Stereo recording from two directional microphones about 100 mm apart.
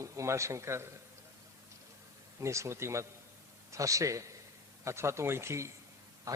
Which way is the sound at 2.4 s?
30° right (ahead or behind).